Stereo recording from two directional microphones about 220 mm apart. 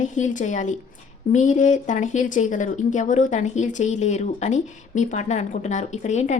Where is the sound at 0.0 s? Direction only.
35° left (ahead or behind).